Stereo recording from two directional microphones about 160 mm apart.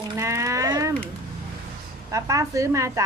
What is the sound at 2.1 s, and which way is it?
Speech, 20° right (ahead or behind).